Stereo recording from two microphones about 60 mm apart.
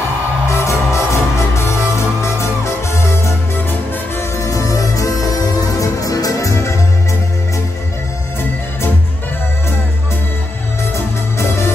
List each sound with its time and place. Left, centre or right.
0.5 s music: left
4.4 s music: left